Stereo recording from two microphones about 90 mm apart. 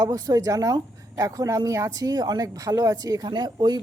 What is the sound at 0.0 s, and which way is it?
A woman's voice, 40° right (ahead or behind).